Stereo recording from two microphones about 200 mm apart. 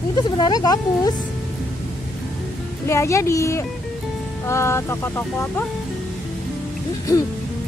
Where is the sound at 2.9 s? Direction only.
15° left (ahead or behind).